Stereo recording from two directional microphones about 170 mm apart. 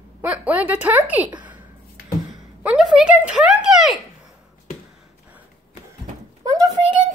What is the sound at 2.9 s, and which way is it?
Speech, 5° right (ahead or behind).